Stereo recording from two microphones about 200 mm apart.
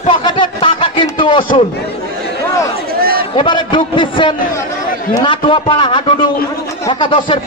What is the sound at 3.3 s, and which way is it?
A man's voice, 25° left (ahead or behind).